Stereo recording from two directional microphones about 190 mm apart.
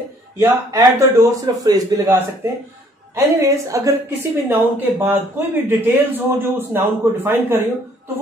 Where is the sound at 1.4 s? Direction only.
20° right (ahead or behind).